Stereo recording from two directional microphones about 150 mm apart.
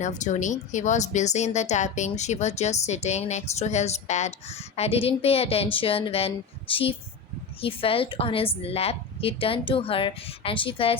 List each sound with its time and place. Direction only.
0.0 s a woman's voice: 55° left (ahead or behind); by 10.9 s 35° left (ahead or behind)